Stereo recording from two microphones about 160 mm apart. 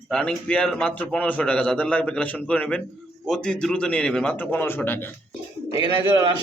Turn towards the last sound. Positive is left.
turn(degrees=-25)  # may be behind; listen again after turning